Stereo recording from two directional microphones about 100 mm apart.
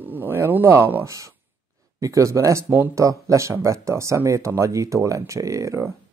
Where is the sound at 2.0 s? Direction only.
35° right (ahead or behind).